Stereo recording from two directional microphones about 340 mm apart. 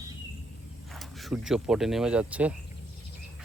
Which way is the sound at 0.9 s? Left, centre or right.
Centre.